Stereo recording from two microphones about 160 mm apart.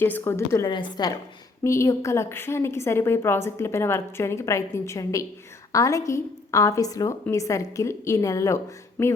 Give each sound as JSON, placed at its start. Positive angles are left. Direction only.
{"t": 0.0, "sound": "a woman's voice", "side_deg": 15}
{"t": 0.7, "sound": "a woman's voice", "side_deg": 30}